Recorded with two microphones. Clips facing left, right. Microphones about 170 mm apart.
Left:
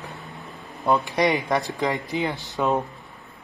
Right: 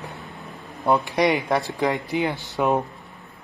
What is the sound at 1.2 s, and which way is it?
A man's voice, 15° right (ahead or behind).